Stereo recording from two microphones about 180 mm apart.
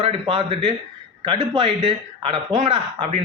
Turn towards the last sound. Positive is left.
turn(degrees=-35)  # may be behind; listen again after turning